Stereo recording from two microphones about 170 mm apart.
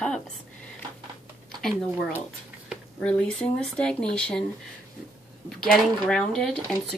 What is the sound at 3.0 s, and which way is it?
Dishes, 5° left (ahead or behind).